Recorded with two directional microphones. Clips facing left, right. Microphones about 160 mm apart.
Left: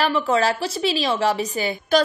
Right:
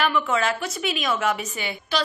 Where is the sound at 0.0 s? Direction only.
35° left (ahead or behind).